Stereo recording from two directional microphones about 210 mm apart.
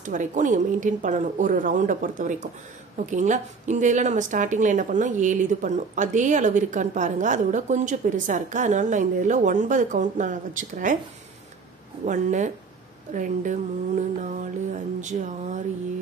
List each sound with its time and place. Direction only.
0.0 s a woman's voice: 35° right (ahead or behind)
12.0 s a woman's voice: 35° right (ahead or behind)